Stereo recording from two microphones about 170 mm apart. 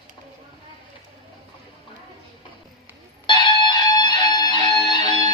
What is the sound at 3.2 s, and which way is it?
Music, 25° left (ahead or behind).